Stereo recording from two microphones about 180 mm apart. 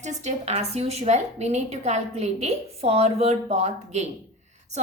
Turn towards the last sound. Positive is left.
turn(degrees=-40)  # may be behind; listen again after turning